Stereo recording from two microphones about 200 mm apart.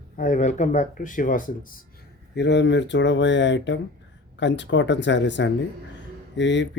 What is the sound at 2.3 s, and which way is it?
Speech, 60° left (ahead or behind).